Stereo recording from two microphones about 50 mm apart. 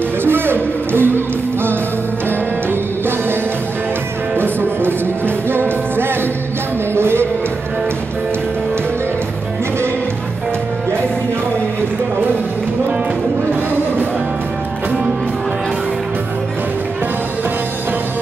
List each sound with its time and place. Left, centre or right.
0.2 s music: right
4.4 s music: right